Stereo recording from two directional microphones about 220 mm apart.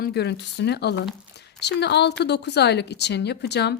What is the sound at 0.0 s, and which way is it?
Speech, 50° left (ahead or behind).